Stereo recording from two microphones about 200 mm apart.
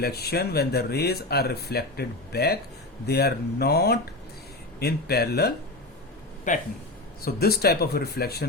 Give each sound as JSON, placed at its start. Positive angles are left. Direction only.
{"t": 0.0, "sound": "speech", "side_deg": 55}
{"t": 6.5, "sound": "speech", "side_deg": 40}
{"t": 7.2, "sound": "speech", "side_deg": 50}